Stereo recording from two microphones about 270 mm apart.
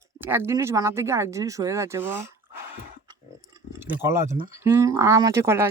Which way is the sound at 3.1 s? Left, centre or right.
Centre.